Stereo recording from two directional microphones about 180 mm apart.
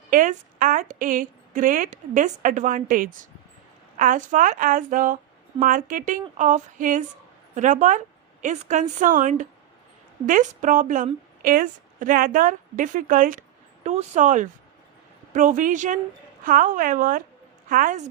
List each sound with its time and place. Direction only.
0.1 s a woman's voice: 50° right (ahead or behind)